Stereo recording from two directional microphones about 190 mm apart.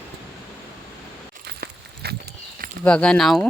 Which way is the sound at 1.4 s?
55° right (ahead or behind).